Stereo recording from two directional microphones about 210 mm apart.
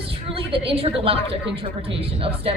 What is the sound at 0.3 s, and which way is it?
A woman's voice, 25° right (ahead or behind).